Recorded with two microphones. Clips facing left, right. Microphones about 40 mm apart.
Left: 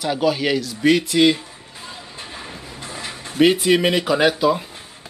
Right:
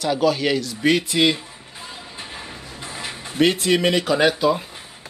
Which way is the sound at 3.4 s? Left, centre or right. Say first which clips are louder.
Left 3 dB; centre.